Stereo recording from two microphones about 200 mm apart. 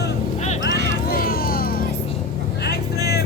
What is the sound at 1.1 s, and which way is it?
Music, 45° left (ahead or behind).